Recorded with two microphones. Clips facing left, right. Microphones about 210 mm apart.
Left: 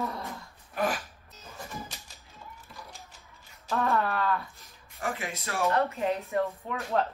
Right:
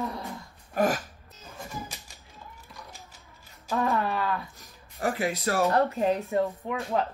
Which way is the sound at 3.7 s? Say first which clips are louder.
Right 1 dB; centre (ahead or behind).